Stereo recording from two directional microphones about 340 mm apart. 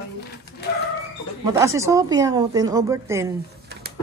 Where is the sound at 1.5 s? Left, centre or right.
Centre.